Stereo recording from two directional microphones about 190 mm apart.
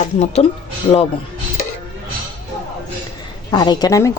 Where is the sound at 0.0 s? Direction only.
35° left (ahead or behind).